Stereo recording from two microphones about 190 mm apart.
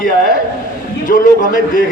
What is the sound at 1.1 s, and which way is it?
Speech, 45° left (ahead or behind).